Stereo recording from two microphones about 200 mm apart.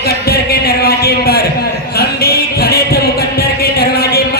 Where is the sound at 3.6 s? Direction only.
50° left (ahead or behind).